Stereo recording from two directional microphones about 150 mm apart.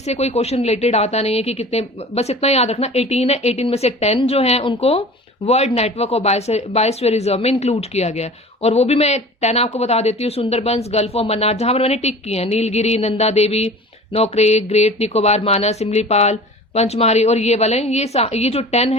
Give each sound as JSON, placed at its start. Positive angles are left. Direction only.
{"t": 0.0, "sound": "speech", "side_deg": 45}